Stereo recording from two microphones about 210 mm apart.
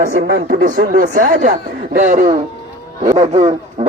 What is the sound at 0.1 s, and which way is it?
Speech, 50° right (ahead or behind).